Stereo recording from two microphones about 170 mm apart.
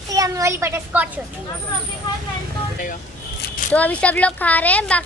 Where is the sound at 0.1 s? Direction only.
20° right (ahead or behind).